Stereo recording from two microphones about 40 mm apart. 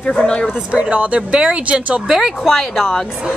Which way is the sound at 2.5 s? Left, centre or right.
Centre.